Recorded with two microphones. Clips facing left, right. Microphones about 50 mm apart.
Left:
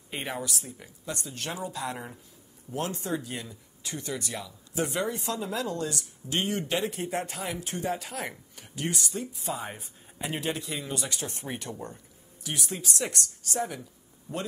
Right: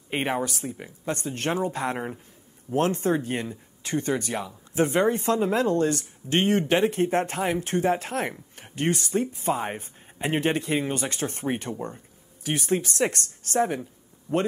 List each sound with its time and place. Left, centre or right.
0.1 s speech: right
14.3 s speech: left